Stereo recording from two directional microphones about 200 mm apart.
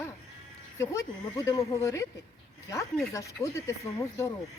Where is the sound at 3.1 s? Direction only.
15° left (ahead or behind).